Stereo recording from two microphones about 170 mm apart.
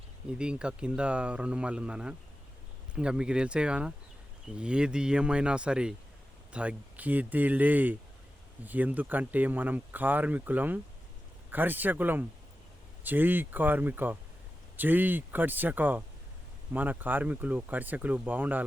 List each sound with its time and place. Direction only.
0.3 s speech: 5° right (ahead or behind)